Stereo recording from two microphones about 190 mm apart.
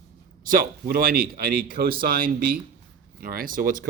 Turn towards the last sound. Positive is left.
turn(degrees=-50)  # may be behind; listen again after turning